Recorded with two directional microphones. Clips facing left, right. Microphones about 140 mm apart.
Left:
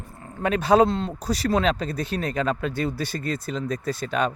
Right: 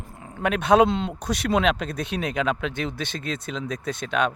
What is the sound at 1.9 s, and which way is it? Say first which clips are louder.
Speech: even; 75° right (ahead or behind).